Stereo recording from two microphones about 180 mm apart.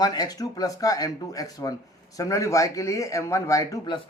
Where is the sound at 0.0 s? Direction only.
20° left (ahead or behind).